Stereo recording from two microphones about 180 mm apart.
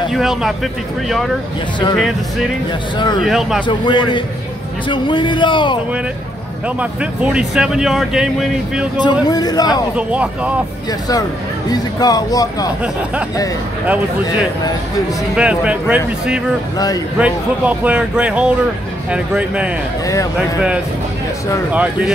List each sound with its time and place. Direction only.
0.1 s speech: centre (ahead or behind)
3.6 s speech: 25° left (ahead or behind)
6.8 s speech: 5° right (ahead or behind)
8.9 s speech: 25° left (ahead or behind)
9.7 s speech: 5° right (ahead or behind)
10.9 s speech: 20° left (ahead or behind)
15.3 s speech: 5° right (ahead or behind)
16.7 s speech: 20° left (ahead or behind)
17.2 s speech: 5° right (ahead or behind)